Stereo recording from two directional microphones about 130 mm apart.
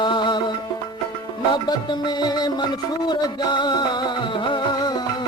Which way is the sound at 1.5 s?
35° left (ahead or behind).